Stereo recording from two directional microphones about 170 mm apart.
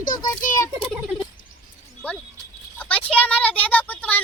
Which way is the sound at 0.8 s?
Centre (ahead or behind).